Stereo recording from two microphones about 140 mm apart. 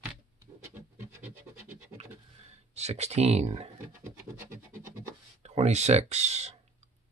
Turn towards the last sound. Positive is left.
turn(degrees=-50)  # may be behind; listen again after turning